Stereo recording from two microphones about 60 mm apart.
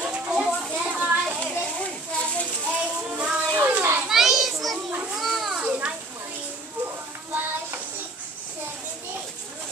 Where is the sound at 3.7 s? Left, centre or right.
Right.